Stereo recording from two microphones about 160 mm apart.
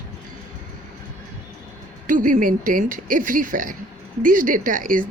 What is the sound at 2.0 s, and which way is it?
A woman's voice, 60° right (ahead or behind).